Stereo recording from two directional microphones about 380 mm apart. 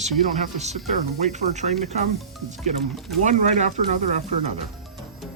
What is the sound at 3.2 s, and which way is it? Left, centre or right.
Speech, centre.